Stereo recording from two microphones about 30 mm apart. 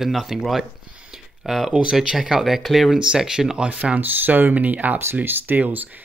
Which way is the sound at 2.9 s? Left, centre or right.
Right.